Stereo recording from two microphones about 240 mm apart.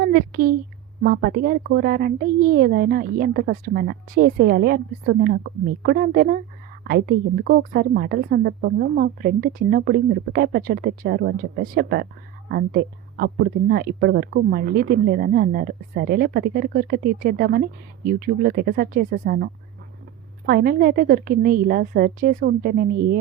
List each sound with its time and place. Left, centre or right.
0.0 s a woman's voice: right